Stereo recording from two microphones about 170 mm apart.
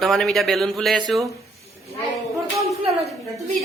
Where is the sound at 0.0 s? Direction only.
Centre (ahead or behind).